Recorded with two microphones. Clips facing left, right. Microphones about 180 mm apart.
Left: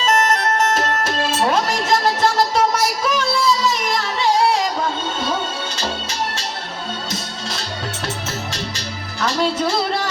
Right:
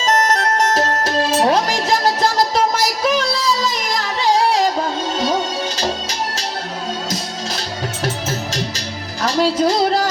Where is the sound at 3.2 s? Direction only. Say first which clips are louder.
Left 1 dB; 35° right (ahead or behind).